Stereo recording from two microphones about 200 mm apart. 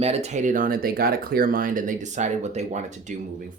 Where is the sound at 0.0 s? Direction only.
30° right (ahead or behind).